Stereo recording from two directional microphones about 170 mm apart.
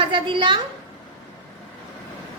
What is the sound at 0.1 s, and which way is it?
Speech, 30° right (ahead or behind).